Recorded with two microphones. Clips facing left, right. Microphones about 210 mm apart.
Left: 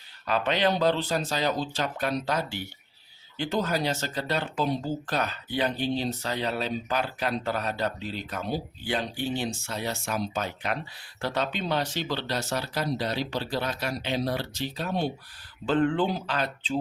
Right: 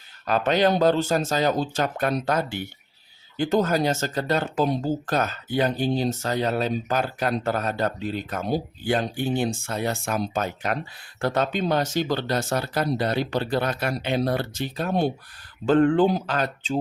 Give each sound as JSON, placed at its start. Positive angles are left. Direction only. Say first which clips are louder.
{"t": 0.3, "sound": "speech", "louder": "right 5 dB", "side_deg": -45}